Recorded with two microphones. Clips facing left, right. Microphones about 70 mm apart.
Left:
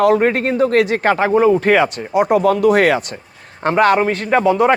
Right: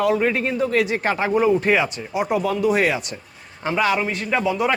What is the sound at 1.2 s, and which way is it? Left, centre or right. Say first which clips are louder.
Speech: left 4 dB; left.